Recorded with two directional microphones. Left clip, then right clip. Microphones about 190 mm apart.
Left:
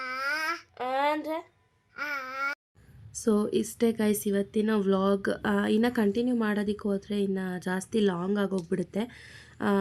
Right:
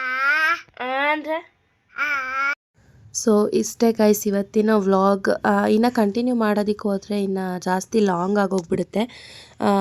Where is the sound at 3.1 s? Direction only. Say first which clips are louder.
Right 9 dB; 25° right (ahead or behind).